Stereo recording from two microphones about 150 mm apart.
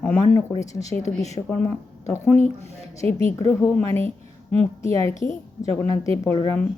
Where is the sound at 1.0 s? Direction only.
50° left (ahead or behind).